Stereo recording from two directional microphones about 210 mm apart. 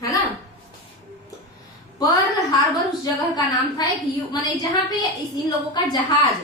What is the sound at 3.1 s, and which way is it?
A woman's voice, 15° left (ahead or behind).